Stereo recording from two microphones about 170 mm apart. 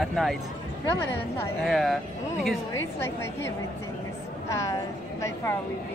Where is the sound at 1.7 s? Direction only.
Centre (ahead or behind).